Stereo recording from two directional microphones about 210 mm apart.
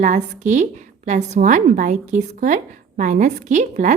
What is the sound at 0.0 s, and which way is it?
A woman's voice, 35° right (ahead or behind).